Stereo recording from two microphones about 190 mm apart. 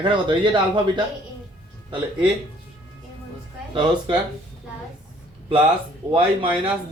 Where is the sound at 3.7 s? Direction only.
25° right (ahead or behind).